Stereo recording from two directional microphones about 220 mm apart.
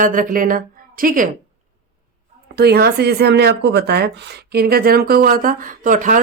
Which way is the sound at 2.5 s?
45° right (ahead or behind).